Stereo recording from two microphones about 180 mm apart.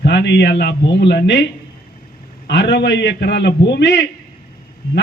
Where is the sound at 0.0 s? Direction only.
70° left (ahead or behind).